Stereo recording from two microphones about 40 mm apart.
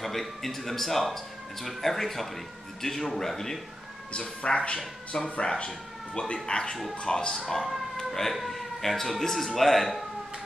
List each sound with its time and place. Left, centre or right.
0.0 s a man's voice: centre
4.1 s speech: left
8.1 s a man's voice: centre